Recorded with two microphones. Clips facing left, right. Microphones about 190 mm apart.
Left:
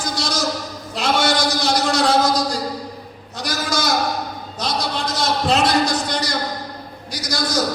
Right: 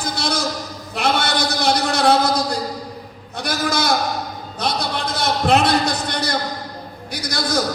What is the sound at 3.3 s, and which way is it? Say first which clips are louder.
Sheep: right 2 dB; 60° right (ahead or behind).